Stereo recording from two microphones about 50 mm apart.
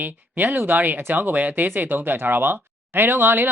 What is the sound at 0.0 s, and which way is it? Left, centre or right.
Speech, right.